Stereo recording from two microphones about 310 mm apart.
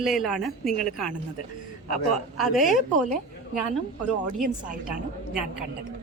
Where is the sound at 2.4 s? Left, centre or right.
Centre.